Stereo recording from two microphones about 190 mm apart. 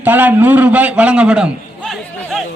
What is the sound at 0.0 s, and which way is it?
A man's voice, 10° right (ahead or behind).